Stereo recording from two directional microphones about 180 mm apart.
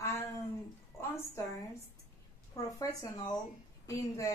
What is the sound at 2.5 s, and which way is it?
Speech, 20° left (ahead or behind).